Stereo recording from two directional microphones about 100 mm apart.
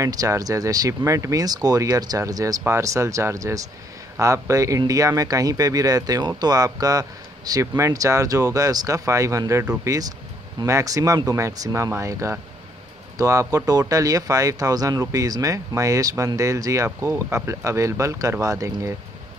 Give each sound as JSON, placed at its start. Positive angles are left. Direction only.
{"t": 0.0, "sound": "speech", "side_deg": -35}